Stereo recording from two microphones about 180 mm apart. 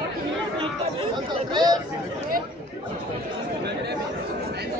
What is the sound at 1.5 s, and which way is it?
Chatter, 25° right (ahead or behind).